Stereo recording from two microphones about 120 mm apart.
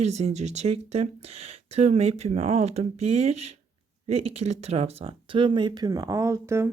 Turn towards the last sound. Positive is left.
turn(degrees=-20)  # may be behind; listen again after turning